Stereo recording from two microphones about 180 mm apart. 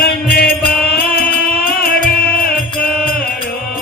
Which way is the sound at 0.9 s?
60° left (ahead or behind).